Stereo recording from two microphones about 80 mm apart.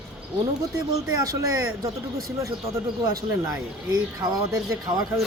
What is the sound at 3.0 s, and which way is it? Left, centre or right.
Speech, right.